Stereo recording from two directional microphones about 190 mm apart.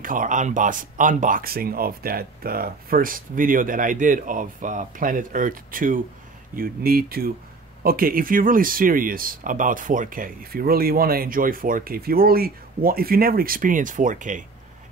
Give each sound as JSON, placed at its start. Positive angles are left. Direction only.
{"t": 0.0, "sound": "speech", "side_deg": -45}